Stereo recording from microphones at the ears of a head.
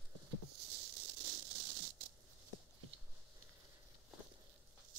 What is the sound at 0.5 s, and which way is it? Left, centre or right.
Rattle, right.